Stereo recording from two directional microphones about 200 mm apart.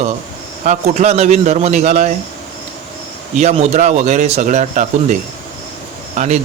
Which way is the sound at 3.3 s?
35° right (ahead or behind).